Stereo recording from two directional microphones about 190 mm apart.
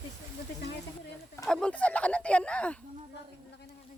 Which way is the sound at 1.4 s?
5° left (ahead or behind).